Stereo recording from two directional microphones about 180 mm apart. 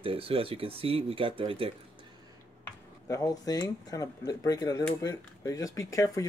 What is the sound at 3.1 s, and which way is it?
Speech, 20° left (ahead or behind).